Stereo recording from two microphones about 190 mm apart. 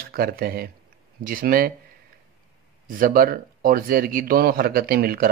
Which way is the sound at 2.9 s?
50° right (ahead or behind).